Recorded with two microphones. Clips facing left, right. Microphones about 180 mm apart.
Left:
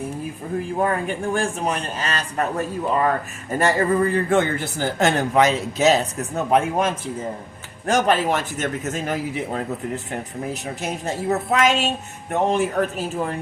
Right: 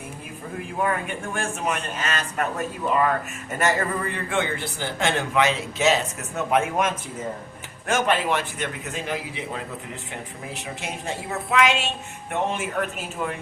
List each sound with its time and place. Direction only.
0.8 s a man's voice: 35° left (ahead or behind)